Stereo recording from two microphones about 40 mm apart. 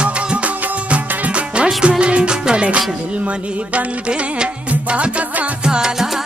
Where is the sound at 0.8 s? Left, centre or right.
Right.